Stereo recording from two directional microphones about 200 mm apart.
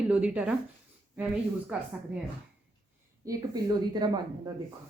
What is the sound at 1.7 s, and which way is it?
Speech, 5° right (ahead or behind).